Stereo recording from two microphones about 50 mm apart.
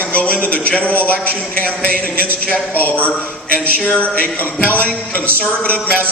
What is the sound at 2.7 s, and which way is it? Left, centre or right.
A man's voice, left.